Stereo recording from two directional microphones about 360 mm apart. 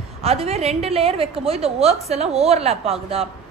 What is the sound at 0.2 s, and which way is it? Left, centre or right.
A woman's voice, centre.